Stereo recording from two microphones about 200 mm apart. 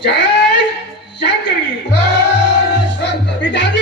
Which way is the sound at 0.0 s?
60° left (ahead or behind).